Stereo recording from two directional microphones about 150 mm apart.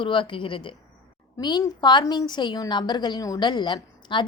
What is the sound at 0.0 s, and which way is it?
A woman's voice, 35° left (ahead or behind).